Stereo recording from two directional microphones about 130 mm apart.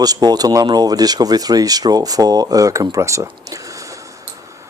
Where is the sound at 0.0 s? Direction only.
30° right (ahead or behind).